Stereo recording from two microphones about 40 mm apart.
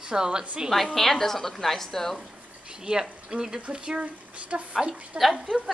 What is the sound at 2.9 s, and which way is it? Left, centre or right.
Speech, right.